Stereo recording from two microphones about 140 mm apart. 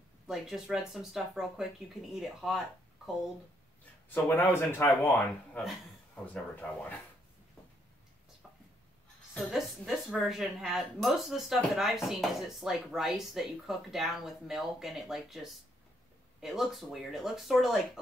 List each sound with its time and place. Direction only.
0.3 s a woman's voice: centre (ahead or behind)
4.1 s speech: 15° left (ahead or behind)
9.5 s a woman's voice: centre (ahead or behind)